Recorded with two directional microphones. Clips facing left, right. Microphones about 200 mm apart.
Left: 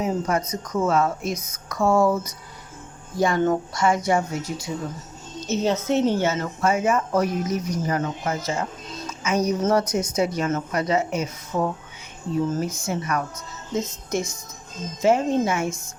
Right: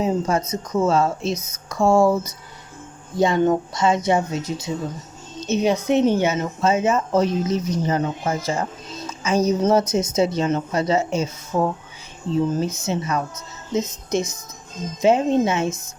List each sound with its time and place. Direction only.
0.0 s speech: 25° right (ahead or behind)